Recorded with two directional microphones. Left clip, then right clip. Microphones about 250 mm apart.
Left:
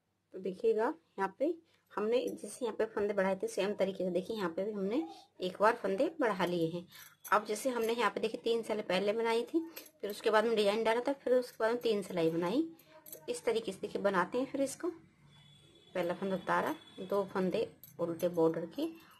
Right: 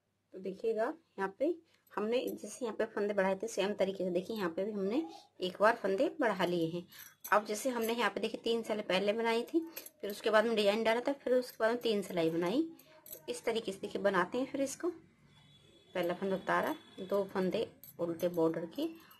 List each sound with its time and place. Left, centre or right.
0.4 s speech: centre
2.0 s a woman's voice: centre
15.9 s a woman's voice: centre